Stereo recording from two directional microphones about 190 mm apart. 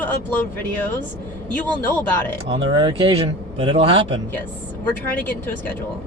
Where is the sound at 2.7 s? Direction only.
25° right (ahead or behind).